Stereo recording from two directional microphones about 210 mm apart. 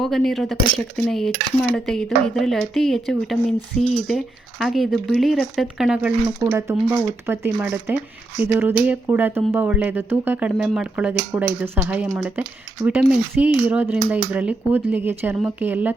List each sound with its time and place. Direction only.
0.0 s speech: centre (ahead or behind)